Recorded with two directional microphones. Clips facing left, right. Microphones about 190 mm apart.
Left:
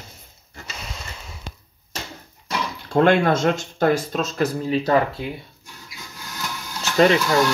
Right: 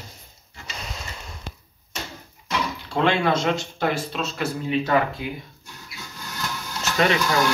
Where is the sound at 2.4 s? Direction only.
50° left (ahead or behind).